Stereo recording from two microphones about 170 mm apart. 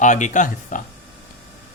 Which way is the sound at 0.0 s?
45° left (ahead or behind).